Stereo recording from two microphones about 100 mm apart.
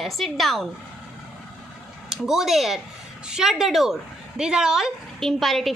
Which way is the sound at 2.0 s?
5° right (ahead or behind).